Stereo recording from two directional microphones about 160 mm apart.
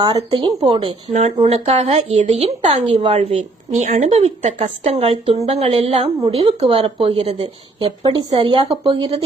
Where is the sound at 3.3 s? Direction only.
50° right (ahead or behind).